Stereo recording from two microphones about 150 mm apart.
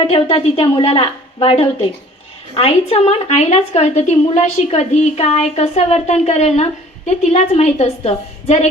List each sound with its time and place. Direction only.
0.0 s a woman's voice: 35° left (ahead or behind)